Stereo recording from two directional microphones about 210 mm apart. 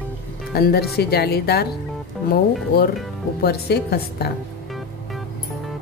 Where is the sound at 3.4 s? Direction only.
50° left (ahead or behind).